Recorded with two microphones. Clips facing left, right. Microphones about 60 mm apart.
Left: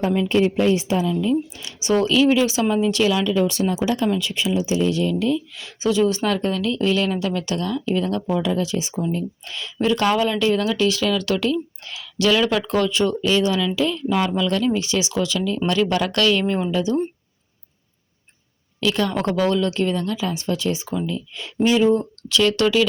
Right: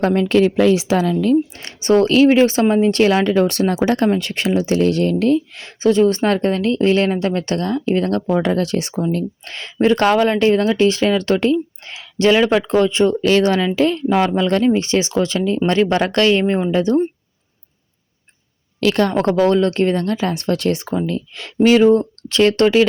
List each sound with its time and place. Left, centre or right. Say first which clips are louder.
0.0 s a woman's voice: right 4 dB; right
1.1 s speech: right 5 dB; right
1.6 s speech: right 4 dB; right
11.5 s a sound: right 5 dB; right
12.5 s speech: right 5 dB; right
13.2 s speech: right 5 dB; right
16.8 s speech: right 5 dB; right
18.8 s speech: right 5 dB; right